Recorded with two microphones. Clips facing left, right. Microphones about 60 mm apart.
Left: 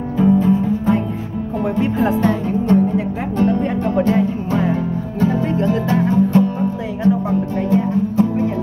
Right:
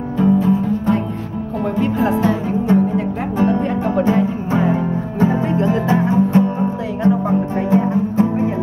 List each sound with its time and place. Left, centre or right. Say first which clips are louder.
0.2 s music: left 1 dB; centre; by 8.5 s right